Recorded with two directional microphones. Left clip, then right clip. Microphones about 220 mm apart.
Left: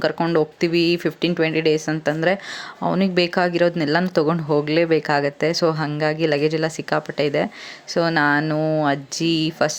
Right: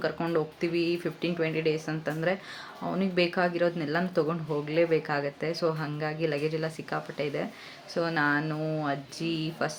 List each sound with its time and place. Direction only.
0.0 s speech: 35° left (ahead or behind)